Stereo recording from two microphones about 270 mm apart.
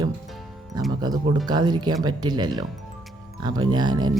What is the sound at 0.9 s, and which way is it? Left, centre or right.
Speech, centre.